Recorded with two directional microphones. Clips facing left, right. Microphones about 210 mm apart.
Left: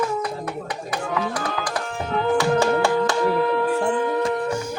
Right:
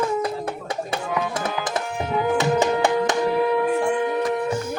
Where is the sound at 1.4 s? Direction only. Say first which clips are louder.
Right 1 dB; 25° right (ahead or behind).